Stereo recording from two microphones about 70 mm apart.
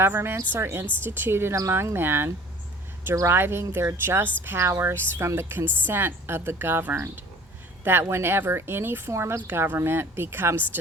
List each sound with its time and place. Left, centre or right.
0.0 s a woman's voice: right
8.1 s a woman's voice: right
9.5 s a woman's voice: right